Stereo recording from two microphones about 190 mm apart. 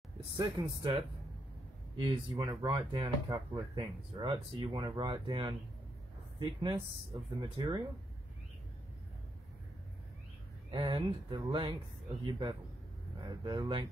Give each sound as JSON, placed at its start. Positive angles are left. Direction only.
{"t": 0.4, "sound": "speech", "side_deg": -25}
{"t": 10.7, "sound": "speech", "side_deg": -25}